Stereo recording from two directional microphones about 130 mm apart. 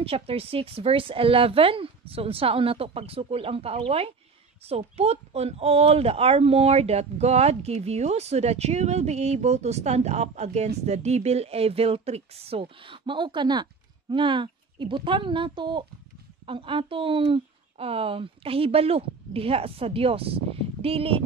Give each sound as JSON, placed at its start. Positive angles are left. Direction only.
{"t": 0.0, "sound": "speech", "side_deg": -45}